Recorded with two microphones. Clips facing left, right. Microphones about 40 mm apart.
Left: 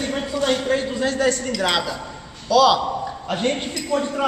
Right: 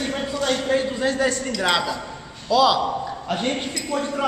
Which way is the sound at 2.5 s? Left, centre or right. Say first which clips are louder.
Left 2 dB; centre.